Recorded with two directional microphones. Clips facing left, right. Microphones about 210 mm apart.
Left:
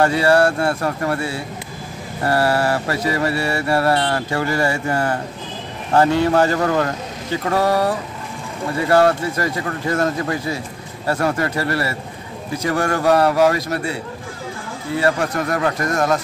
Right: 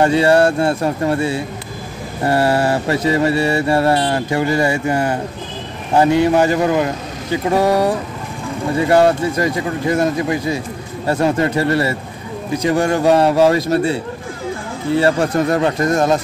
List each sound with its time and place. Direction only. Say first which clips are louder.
0.0 s mantra: right 3 dB; 20° right (ahead or behind)
5.9 s speech: right 2 dB; 15° right (ahead or behind)
11.1 s mantra: right 4 dB; 20° right (ahead or behind)
15.0 s mantra: right 4 dB; 30° right (ahead or behind)